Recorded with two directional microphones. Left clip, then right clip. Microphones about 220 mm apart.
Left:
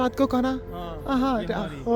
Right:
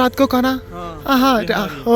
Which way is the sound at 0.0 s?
Centre (ahead or behind).